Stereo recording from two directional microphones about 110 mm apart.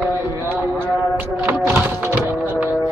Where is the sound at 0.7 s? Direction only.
20° right (ahead or behind).